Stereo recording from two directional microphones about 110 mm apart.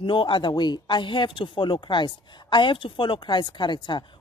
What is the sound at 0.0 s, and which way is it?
A woman's voice, 50° left (ahead or behind).